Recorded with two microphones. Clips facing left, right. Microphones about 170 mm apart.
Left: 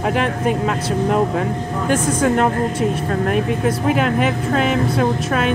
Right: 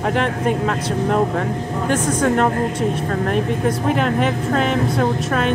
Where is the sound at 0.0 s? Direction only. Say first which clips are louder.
Left 1 dB; 10° left (ahead or behind).